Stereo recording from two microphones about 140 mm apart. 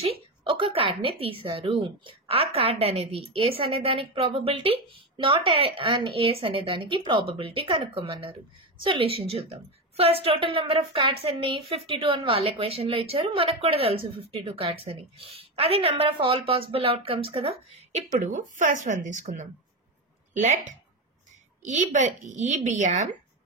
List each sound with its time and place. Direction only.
0.4 s a woman's voice: 35° right (ahead or behind); by 23.1 s 60° right (ahead or behind)